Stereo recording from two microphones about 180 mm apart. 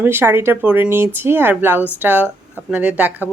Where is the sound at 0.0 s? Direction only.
10° right (ahead or behind).